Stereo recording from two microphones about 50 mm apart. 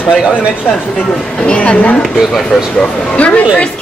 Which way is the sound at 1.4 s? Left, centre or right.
Left.